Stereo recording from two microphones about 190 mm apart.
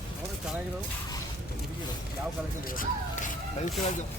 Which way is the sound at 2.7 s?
45° left (ahead or behind).